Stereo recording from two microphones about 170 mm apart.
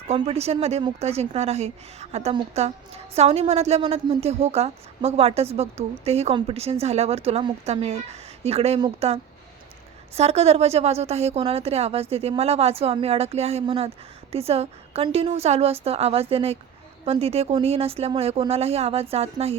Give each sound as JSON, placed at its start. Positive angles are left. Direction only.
{"t": 0.1, "sound": "a woman's voice", "side_deg": -35}